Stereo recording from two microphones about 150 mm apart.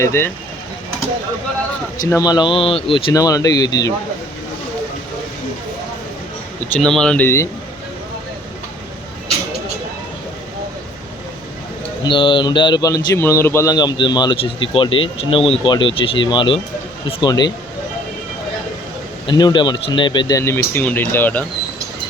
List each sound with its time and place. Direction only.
0.0 s speech: 15° left (ahead or behind)
2.0 s speech: 25° left (ahead or behind)
3.1 s speech: 25° left (ahead or behind)
6.7 s speech: 5° left (ahead or behind)
12.0 s speech: 35° left (ahead or behind); by 13.7 s 15° left (ahead or behind)
13.7 s speech: 30° left (ahead or behind)
19.3 s speech: 30° left (ahead or behind); by 21.4 s 15° left (ahead or behind)